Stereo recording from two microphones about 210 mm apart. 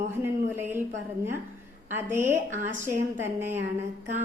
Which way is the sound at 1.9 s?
10° right (ahead or behind).